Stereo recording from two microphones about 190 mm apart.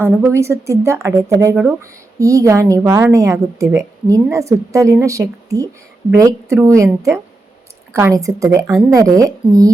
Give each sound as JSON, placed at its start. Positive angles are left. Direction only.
{"t": 0.0, "sound": "a woman's voice", "side_deg": -15}